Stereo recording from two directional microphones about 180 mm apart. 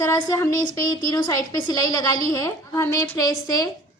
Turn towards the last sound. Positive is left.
turn(degrees=20)  # may be behind; listen again after turning